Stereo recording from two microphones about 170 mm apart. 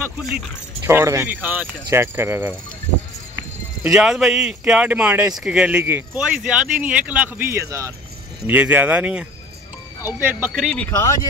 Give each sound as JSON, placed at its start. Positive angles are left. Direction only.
{"t": 0.8, "sound": "speech", "side_deg": -15}
{"t": 3.8, "sound": "speech", "side_deg": -5}
{"t": 10.9, "sound": "speech", "side_deg": 15}